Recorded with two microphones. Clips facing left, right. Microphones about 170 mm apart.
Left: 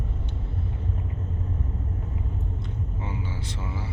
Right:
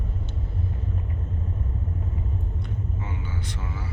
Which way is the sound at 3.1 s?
25° left (ahead or behind).